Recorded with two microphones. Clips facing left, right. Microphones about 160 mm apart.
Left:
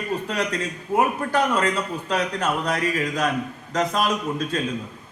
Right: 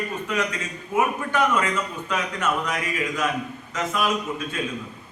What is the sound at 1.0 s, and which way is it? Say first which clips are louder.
A man's voice: left 1 dB; 35° left (ahead or behind).